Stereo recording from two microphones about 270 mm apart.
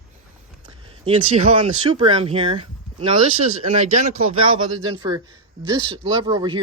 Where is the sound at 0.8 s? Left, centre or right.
Right.